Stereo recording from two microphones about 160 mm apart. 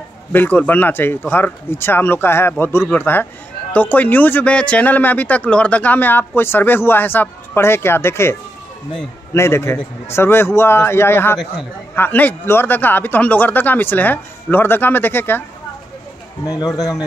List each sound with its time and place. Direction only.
0.3 s speech: 10° left (ahead or behind)
16.4 s speech: 25° left (ahead or behind)